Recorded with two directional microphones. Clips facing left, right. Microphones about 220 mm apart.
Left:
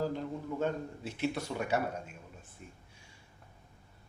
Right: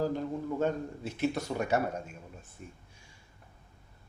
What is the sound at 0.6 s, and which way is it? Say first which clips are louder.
A man's voice: right 1 dB; 45° right (ahead or behind).